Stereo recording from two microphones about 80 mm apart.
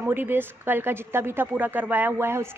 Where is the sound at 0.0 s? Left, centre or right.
Right.